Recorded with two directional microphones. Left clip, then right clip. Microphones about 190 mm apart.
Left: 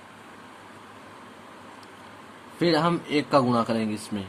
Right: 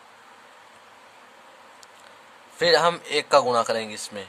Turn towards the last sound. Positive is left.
turn(degrees=-30)  # may be behind; listen again after turning